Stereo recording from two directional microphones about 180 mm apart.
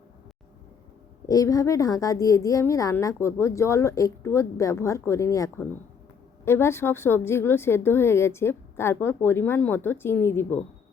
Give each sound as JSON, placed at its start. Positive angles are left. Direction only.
{"t": 1.3, "sound": "a woman's voice", "side_deg": 20}